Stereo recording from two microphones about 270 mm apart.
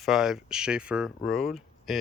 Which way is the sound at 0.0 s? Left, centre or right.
Centre.